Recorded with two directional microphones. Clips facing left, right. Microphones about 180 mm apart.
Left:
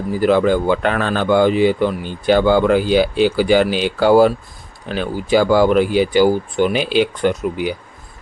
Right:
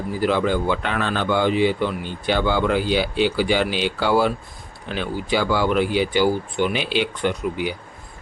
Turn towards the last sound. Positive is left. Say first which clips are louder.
# left 5 dB
turn(degrees=45)  # may be behind; listen again after turning